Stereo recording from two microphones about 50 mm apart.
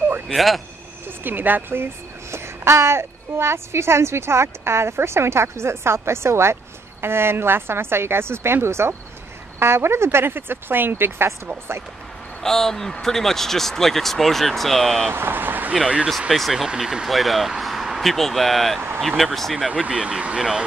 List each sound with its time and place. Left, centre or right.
0.3 s speech: centre
1.2 s speech: right
2.3 s a woman's voice: right
12.4 s speech: centre
15.1 s speech: right
16.3 s speech: centre
16.6 s speech: centre
19.7 s speech: centre